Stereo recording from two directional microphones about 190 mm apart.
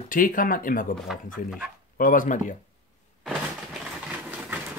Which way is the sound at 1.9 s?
45° left (ahead or behind).